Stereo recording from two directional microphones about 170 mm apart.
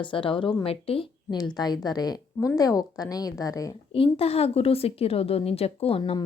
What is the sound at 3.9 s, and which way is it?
Speech, 35° left (ahead or behind).